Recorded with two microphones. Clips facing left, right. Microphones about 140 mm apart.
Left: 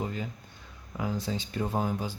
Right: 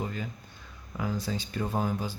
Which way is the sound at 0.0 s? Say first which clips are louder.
Left 1 dB; 25° left (ahead or behind).